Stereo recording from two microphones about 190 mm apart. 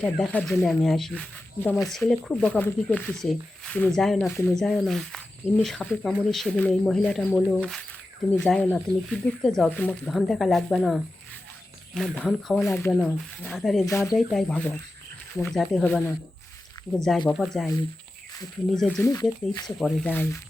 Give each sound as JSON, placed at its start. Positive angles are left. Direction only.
{"t": 0.0, "sound": "speech", "side_deg": 5}
{"t": 4.3, "sound": "speech", "side_deg": 10}
{"t": 4.6, "sound": "speech", "side_deg": 0}
{"t": 12.9, "sound": "speech", "side_deg": 0}
{"t": 13.8, "sound": "speech", "side_deg": 15}
{"t": 14.2, "sound": "speech", "side_deg": 0}
{"t": 18.7, "sound": "speech", "side_deg": 5}
{"t": 19.0, "sound": "speech", "side_deg": 20}
{"t": 19.8, "sound": "speech", "side_deg": 5}